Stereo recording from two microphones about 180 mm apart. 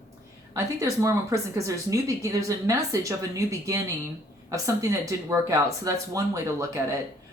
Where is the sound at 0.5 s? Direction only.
15° right (ahead or behind).